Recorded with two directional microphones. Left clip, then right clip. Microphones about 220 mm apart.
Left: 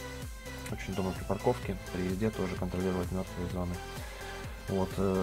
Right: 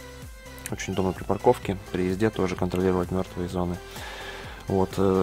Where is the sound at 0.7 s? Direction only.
30° right (ahead or behind).